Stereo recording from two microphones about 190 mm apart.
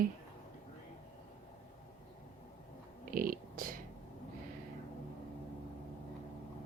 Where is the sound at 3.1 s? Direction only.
50° right (ahead or behind).